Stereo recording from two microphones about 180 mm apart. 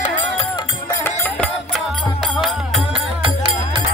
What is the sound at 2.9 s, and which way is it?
Music, 30° right (ahead or behind).